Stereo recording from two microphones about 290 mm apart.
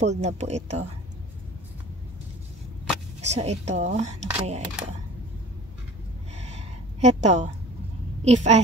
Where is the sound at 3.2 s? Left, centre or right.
Right.